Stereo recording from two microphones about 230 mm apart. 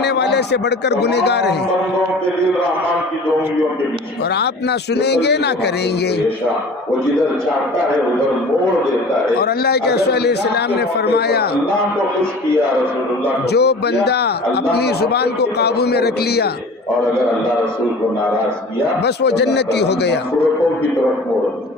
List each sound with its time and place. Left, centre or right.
0.0 s a man's voice: left
4.4 s a man's voice: left
9.4 s a man's voice: left
13.5 s a man's voice: left
19.0 s a man's voice: left